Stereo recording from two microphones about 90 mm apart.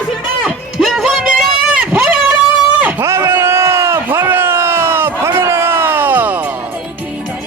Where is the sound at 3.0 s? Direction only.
30° right (ahead or behind).